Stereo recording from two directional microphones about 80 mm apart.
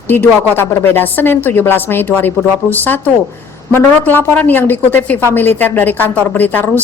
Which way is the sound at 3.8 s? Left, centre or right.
Left.